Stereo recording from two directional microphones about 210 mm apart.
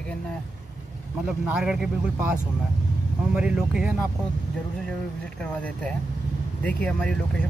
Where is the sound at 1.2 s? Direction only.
5° right (ahead or behind).